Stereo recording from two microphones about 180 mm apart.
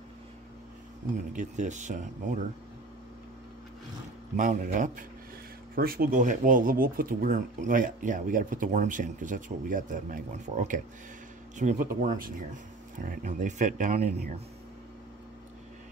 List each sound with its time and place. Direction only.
1.3 s speech: 45° right (ahead or behind)
4.4 s speech: 45° right (ahead or behind)
5.8 s speech: 55° right (ahead or behind)